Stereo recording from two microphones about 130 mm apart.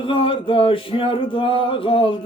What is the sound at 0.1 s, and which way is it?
Music, 40° left (ahead or behind).